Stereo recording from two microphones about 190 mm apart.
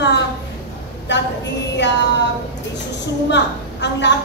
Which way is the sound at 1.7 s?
70° left (ahead or behind).